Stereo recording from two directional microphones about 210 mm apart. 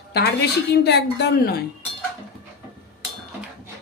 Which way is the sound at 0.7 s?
55° left (ahead or behind).